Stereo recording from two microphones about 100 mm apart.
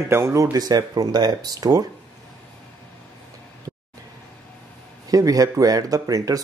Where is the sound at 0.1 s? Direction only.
30° right (ahead or behind).